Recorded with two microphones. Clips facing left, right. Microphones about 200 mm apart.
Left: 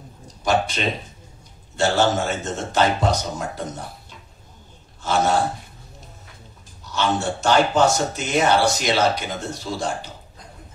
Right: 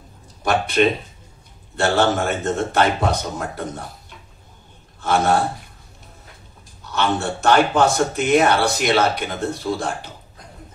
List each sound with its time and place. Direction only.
0.4 s speech: 60° right (ahead or behind)
5.0 s speech: 60° right (ahead or behind)
6.9 s speech: 60° right (ahead or behind)